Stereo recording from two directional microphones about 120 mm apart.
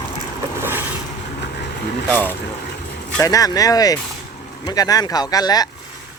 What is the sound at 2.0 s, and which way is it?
Speech, 15° left (ahead or behind).